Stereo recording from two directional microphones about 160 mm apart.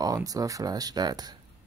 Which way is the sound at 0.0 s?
20° right (ahead or behind).